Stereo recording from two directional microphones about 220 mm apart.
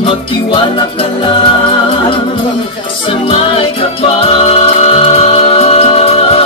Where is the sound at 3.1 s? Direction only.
25° left (ahead or behind).